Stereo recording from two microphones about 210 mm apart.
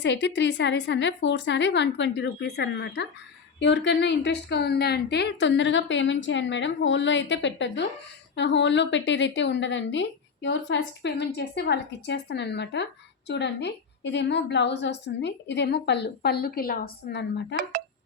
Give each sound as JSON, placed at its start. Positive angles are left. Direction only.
{"t": 0.0, "sound": "a woman's voice", "side_deg": 55}
{"t": 17.6, "sound": "speech", "side_deg": -45}